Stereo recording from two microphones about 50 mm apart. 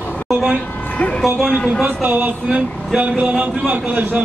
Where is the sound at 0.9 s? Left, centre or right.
Left.